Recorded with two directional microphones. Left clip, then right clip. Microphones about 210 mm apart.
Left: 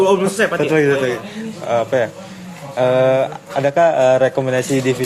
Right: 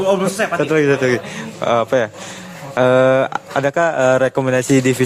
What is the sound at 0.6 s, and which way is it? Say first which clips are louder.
Speech: right 2 dB; 40° right (ahead or behind).